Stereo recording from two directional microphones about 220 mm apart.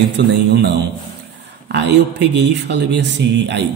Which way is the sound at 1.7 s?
50° right (ahead or behind).